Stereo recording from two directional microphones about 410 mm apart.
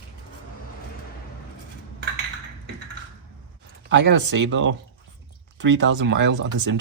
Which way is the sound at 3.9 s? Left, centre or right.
Right.